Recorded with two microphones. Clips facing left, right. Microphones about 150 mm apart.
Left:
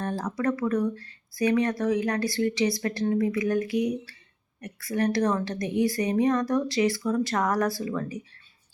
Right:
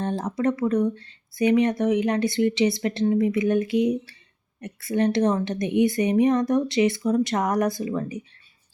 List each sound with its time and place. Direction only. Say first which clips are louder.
0.0 s speech: right 3 dB; 20° right (ahead or behind)